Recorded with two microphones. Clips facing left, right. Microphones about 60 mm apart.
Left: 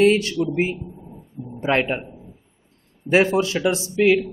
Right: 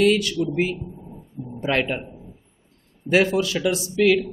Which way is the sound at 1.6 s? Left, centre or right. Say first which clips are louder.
Left 2 dB; left.